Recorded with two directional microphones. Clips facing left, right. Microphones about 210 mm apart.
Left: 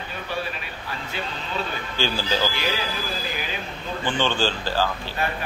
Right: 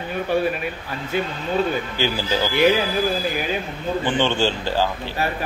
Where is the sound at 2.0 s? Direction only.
15° right (ahead or behind).